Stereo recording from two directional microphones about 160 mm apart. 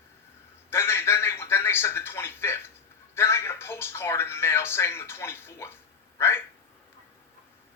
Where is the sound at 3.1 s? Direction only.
15° left (ahead or behind).